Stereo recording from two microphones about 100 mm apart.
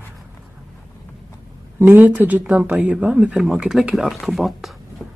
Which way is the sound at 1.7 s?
20° right (ahead or behind).